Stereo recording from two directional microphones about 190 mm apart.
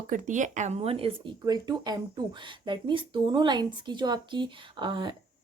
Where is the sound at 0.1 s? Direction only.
40° right (ahead or behind).